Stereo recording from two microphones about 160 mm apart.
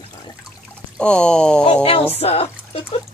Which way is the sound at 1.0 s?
5° left (ahead or behind).